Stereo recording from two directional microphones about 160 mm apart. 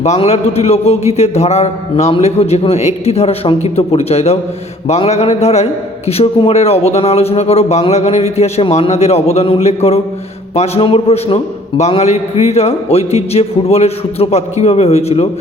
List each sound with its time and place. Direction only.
0.0 s a man's voice: 40° left (ahead or behind)